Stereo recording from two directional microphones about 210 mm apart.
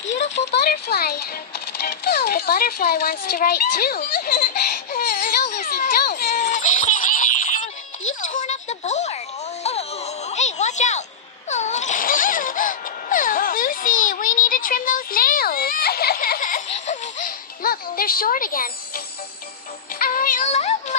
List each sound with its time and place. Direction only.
0.0 s a sound: 60° left (ahead or behind); by 9.2 s 30° left (ahead or behind)
9.6 s music: 30° left (ahead or behind)
11.4 s wail: 35° left (ahead or behind)
20.0 s music: 40° left (ahead or behind)